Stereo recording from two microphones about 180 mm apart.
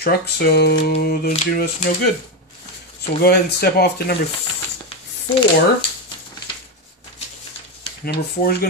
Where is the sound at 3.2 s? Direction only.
65° left (ahead or behind).